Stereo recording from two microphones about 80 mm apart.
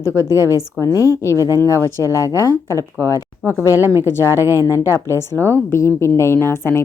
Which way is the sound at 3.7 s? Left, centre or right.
Right.